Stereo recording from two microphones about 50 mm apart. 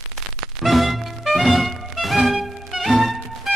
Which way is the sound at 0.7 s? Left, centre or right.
Centre.